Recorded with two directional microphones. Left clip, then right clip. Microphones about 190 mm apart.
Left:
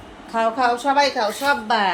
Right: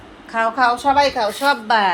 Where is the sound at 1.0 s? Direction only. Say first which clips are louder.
Right 2 dB; 25° right (ahead or behind).